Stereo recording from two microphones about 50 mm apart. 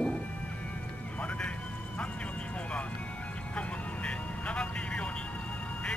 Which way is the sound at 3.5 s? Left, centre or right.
Left.